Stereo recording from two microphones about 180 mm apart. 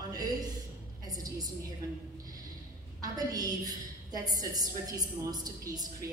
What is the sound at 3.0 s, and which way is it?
A woman's voice, 20° right (ahead or behind).